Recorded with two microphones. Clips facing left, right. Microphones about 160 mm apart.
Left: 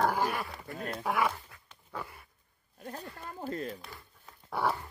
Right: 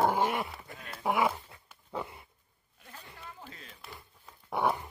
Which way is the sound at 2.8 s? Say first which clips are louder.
Left 8 dB; 45° left (ahead or behind).